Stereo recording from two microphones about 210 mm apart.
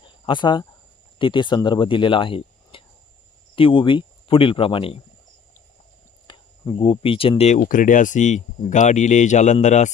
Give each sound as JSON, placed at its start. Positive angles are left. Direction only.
{"t": 0.0, "sound": "cricket", "side_deg": 20}
{"t": 1.2, "sound": "speech", "side_deg": 20}
{"t": 6.2, "sound": "speech", "side_deg": 25}